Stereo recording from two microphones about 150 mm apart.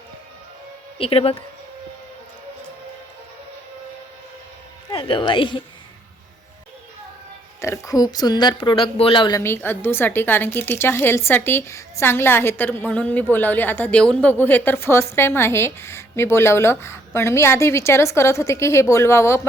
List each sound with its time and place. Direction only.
0.9 s a woman's voice: 40° left (ahead or behind)
4.9 s a woman's voice: 35° left (ahead or behind)
7.6 s a woman's voice: 20° left (ahead or behind)
9.4 s a woman's voice: 15° left (ahead or behind)